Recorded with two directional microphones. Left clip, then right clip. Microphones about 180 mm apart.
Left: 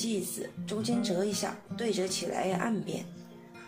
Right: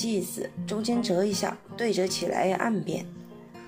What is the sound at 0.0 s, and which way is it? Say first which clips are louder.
Speech: right 4 dB; 35° right (ahead or behind).